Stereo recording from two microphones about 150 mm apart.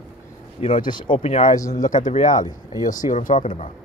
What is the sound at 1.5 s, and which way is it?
Speech, 20° left (ahead or behind).